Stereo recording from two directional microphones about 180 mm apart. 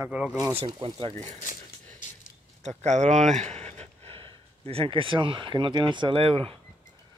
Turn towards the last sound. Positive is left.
turn(degrees=-30)  # may be behind; listen again after turning